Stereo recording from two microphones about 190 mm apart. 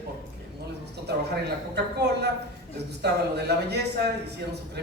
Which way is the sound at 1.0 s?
60° right (ahead or behind).